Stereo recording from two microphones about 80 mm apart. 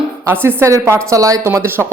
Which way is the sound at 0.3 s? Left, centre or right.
Right.